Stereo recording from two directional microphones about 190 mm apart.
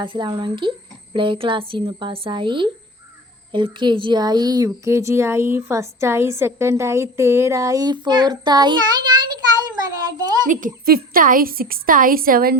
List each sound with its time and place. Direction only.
0.0 s speech: 25° right (ahead or behind)
10.4 s a woman's voice: 45° right (ahead or behind)